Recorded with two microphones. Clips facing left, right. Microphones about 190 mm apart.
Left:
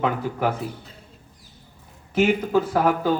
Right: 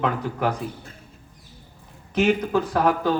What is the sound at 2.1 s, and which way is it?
Speech, 5° left (ahead or behind).